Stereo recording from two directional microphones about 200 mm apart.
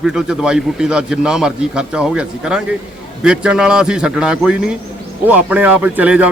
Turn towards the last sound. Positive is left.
turn(degrees=-5)  # may be behind; listen again after turning